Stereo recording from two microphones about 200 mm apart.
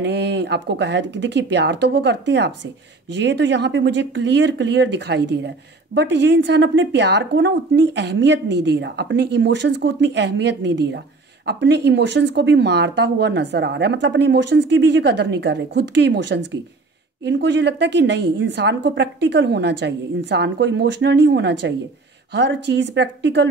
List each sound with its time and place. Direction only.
0.0 s a woman's voice: 60° right (ahead or behind)